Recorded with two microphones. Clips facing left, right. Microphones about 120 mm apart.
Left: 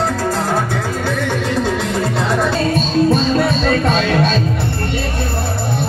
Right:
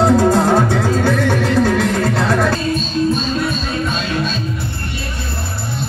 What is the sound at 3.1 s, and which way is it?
Music, 80° left.